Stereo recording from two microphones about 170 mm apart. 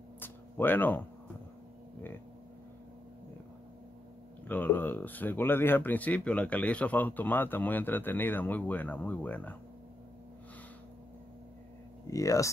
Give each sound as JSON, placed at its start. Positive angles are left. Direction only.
{"t": 0.2, "sound": "a sound", "side_deg": 10}
{"t": 4.5, "sound": "speech", "side_deg": 10}
{"t": 12.1, "sound": "speech", "side_deg": 20}